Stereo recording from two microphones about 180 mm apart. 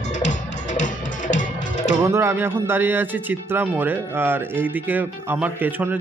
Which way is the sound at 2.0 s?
15° right (ahead or behind).